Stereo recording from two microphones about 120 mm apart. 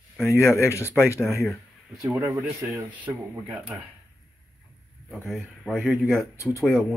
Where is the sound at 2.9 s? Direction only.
10° right (ahead or behind).